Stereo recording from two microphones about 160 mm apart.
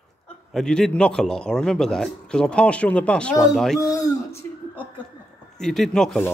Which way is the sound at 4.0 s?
20° left (ahead or behind).